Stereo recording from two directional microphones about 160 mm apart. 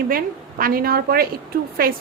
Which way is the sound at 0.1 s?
65° right (ahead or behind).